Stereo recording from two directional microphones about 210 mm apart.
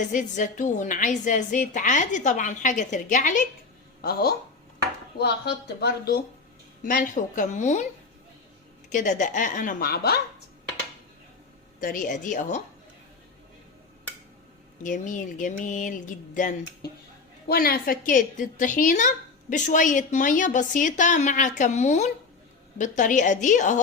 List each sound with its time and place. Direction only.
0.1 s a woman's voice: 35° left (ahead or behind)
4.0 s speech: 45° left (ahead or behind)
5.8 s a woman's voice: 45° left (ahead or behind)
8.9 s a woman's voice: 35° left (ahead or behind)
11.8 s a woman's voice: 40° left (ahead or behind)
14.8 s a woman's voice: 35° left (ahead or behind)